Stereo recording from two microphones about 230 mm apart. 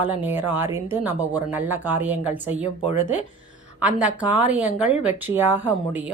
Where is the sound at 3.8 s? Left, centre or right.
Centre.